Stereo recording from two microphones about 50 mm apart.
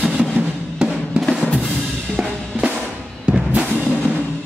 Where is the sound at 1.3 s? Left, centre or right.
Left.